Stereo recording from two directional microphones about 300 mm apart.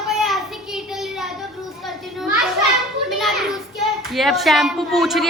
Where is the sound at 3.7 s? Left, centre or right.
Centre.